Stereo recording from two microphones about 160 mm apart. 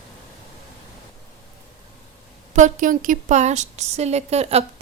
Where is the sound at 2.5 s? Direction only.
50° right (ahead or behind).